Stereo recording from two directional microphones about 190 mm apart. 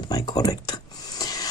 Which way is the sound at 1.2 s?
20° left (ahead or behind).